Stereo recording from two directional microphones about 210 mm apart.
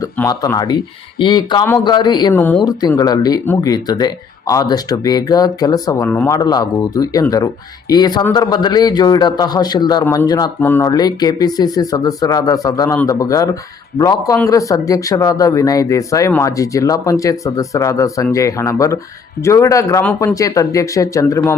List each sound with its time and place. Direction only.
0.0 s speech: 15° left (ahead or behind)
2.4 s speech: 10° left (ahead or behind)